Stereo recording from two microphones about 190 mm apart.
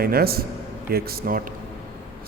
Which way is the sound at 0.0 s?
55° right (ahead or behind).